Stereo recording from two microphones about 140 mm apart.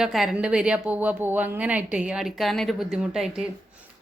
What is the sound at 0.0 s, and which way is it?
A woman's voice, centre (ahead or behind).